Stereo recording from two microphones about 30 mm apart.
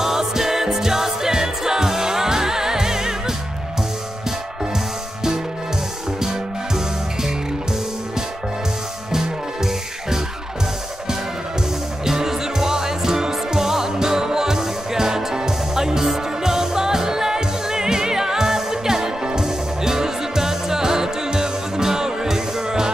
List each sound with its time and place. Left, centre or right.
0.0 s music: centre
6.2 s music: centre
9.1 s music: centre
12.0 s music: centre